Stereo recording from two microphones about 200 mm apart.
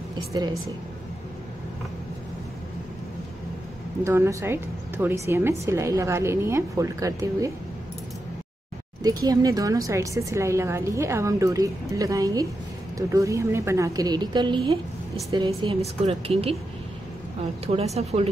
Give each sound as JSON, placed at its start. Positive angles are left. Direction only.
{"t": 0.3, "sound": "a woman's voice", "side_deg": -15}
{"t": 4.0, "sound": "a woman's voice", "side_deg": -15}
{"t": 9.0, "sound": "a woman's voice", "side_deg": -20}
{"t": 17.6, "sound": "speech", "side_deg": -30}